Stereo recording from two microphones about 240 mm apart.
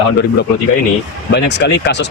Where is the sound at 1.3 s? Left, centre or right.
Left.